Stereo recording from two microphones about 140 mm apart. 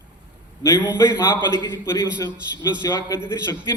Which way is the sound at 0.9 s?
20° left (ahead or behind).